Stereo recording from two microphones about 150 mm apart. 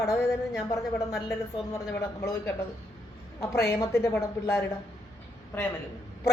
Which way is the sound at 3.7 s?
20° left (ahead or behind).